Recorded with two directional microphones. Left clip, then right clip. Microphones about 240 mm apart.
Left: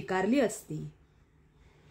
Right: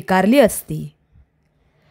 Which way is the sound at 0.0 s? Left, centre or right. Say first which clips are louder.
Right 15 dB; right.